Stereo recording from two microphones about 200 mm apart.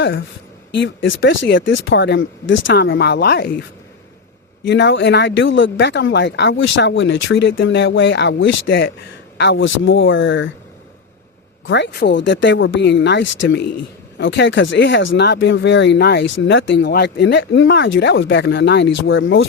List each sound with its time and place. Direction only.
0.0 s speech: 60° left (ahead or behind)
4.6 s speech: 60° left (ahead or behind)
11.6 s speech: 60° left (ahead or behind)